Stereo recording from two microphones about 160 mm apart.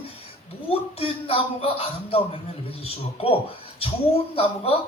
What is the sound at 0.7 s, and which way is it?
A man's voice, 35° left (ahead or behind).